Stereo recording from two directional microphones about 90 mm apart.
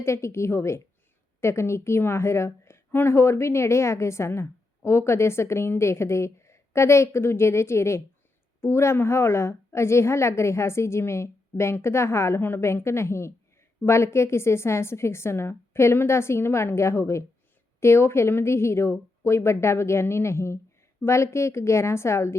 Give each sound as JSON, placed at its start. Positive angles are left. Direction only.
{"t": 0.0, "sound": "a woman's voice", "side_deg": 30}